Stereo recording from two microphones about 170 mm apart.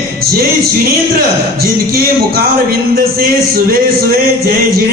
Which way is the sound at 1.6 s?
60° right (ahead or behind).